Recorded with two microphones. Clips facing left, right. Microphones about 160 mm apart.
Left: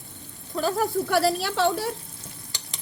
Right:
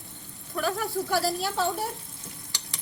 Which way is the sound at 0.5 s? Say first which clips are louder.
Left 4 dB; 35° left (ahead or behind).